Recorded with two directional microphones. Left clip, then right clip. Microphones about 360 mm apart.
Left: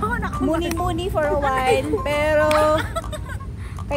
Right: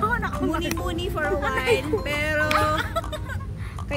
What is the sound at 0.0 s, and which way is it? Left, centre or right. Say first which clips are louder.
Speech: left 1 dB; centre.